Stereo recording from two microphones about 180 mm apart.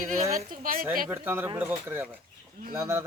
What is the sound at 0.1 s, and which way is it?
Speech, 50° right (ahead or behind).